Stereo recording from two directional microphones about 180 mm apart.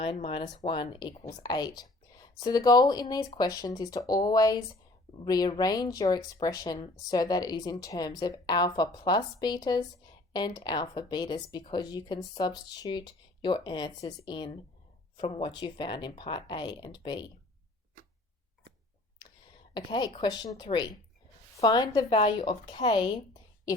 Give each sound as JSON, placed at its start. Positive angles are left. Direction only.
{"t": 0.0, "sound": "speech", "side_deg": 30}
{"t": 1.4, "sound": "whispering", "side_deg": 25}
{"t": 2.4, "sound": "speech", "side_deg": 20}
{"t": 19.7, "sound": "speech", "side_deg": 25}